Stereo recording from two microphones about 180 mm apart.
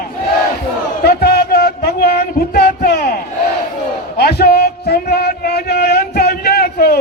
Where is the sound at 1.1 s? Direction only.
60° left (ahead or behind).